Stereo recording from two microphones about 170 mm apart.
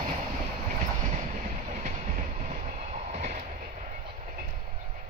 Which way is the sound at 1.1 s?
45° right (ahead or behind).